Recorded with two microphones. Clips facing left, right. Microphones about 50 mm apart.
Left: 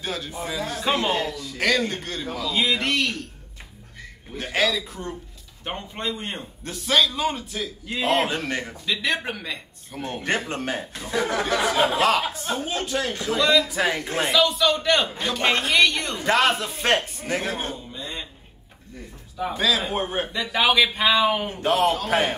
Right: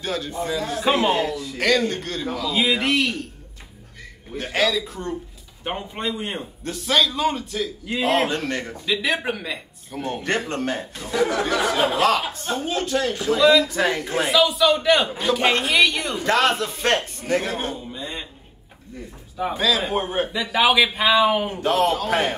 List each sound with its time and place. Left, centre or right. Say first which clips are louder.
0.0 s a man's voice: right 4 dB; centre
4.4 s a man's voice: right 2 dB; centre
17.7 s a sound: right 2 dB; centre
19.3 s a man's voice: right 2 dB; centre
19.6 s a man's voice: right 1 dB; centre